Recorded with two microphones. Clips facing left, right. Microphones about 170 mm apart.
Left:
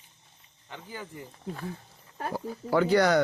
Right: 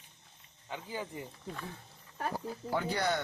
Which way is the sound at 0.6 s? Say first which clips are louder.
Right 2 dB; 15° right (ahead or behind).